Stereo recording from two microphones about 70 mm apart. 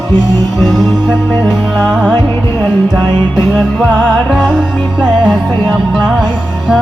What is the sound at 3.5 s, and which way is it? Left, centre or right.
Music, centre.